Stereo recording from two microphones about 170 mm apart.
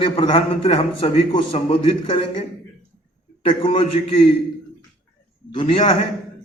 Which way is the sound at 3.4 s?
30° left (ahead or behind).